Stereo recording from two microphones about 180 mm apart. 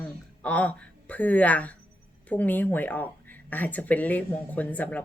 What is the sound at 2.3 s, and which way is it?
Speech, 10° left (ahead or behind).